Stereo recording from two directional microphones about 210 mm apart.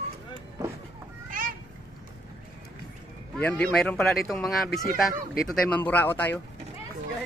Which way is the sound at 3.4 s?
10° left (ahead or behind).